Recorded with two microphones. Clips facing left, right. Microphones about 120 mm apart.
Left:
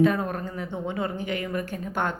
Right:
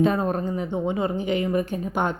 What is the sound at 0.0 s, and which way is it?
A woman's voice, 25° right (ahead or behind).